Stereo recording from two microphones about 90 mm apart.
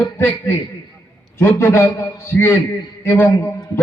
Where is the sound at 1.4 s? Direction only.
25° left (ahead or behind).